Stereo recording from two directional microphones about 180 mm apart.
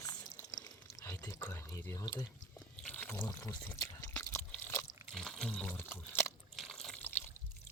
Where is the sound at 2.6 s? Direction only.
10° left (ahead or behind).